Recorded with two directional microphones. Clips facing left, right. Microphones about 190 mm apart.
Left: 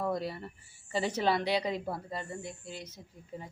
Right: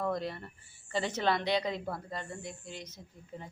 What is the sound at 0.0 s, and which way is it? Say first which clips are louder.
A man's voice: left 1 dB; 10° left (ahead or behind).